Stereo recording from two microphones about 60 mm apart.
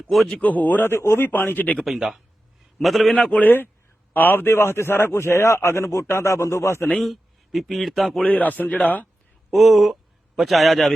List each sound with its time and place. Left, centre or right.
0.1 s a man's voice: centre
0.3 s speech: left
0.9 s speech: left
1.8 s a man's voice: centre
3.2 s speech: left
4.1 s a man's voice: left
7.0 s speech: centre
8.2 s speech: left
9.5 s a man's voice: centre